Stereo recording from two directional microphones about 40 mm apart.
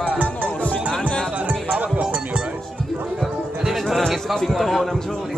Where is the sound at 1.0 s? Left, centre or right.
Left.